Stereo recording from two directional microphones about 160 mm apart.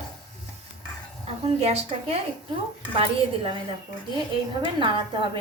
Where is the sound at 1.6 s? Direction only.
40° right (ahead or behind).